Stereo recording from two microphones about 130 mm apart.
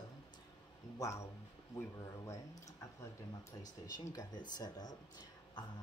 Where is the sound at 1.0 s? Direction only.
20° left (ahead or behind).